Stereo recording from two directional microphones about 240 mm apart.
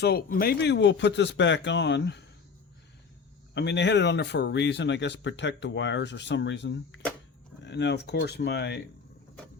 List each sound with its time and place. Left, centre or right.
0.0 s speech: left
3.5 s speech: left